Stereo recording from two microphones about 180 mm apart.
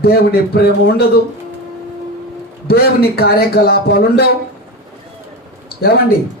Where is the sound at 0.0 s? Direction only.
60° left (ahead or behind).